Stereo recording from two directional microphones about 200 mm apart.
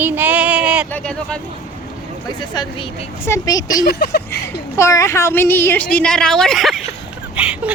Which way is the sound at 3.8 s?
55° left (ahead or behind).